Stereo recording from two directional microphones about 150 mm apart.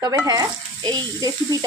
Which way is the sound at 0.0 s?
20° right (ahead or behind).